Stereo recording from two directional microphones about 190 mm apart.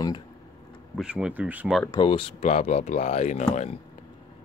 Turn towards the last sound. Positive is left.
turn(degrees=35)  # may be behind; listen again after turning